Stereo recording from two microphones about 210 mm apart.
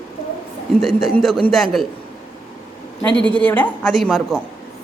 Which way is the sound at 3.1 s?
20° right (ahead or behind).